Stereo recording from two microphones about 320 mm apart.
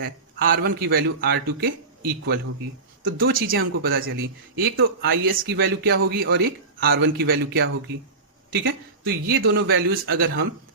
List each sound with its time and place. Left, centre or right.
0.0 s a man's voice: right